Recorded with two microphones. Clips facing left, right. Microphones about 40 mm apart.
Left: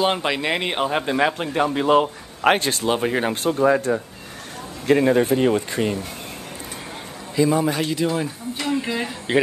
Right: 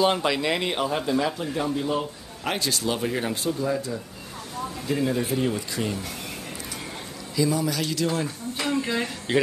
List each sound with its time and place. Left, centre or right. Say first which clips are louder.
0.0 s speech: left 1 dB; left
2.5 s speech: left 6 dB; left
3.5 s speech: left 9 dB; left
7.3 s a man's voice: left 5 dB; left; by 9.4 s centre